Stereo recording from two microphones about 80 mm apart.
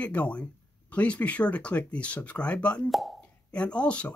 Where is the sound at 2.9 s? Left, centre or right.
Centre.